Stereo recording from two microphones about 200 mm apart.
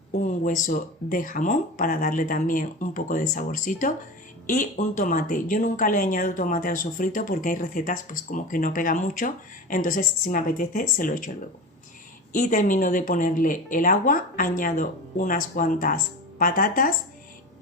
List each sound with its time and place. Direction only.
0.1 s speech: 40° left (ahead or behind)
12.3 s speech: 40° left (ahead or behind)